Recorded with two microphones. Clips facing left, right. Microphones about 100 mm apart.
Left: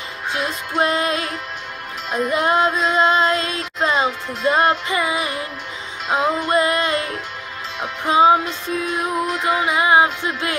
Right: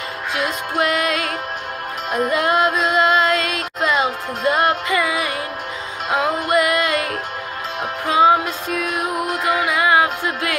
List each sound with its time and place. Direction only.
0.3 s child singing: 30° left (ahead or behind)
2.0 s music: 45° right (ahead or behind)
2.3 s child singing: 25° left (ahead or behind)
8.1 s child singing: 25° left (ahead or behind)
9.4 s child singing: 25° left (ahead or behind)